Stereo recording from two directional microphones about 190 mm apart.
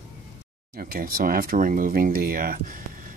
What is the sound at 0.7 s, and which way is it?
Speech, 50° right (ahead or behind).